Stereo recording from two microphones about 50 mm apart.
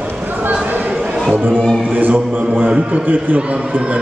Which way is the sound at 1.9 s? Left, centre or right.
Right.